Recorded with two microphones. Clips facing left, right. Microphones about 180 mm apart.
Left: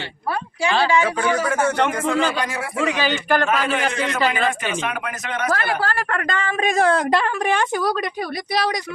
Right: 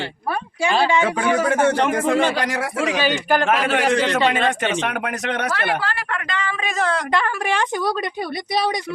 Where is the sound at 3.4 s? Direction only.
75° right (ahead or behind).